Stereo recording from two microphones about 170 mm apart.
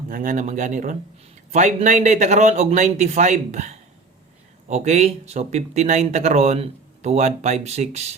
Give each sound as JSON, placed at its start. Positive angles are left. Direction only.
{"t": 0.1, "sound": "speech", "side_deg": -50}